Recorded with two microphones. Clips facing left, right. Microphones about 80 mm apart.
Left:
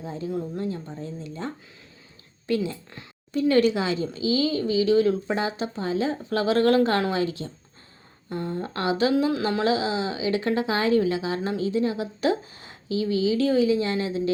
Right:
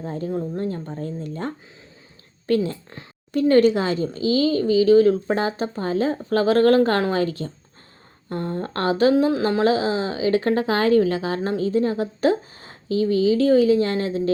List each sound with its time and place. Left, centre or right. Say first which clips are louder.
0.0 s speech: right 3 dB; right
2.9 s speech: right 4 dB; right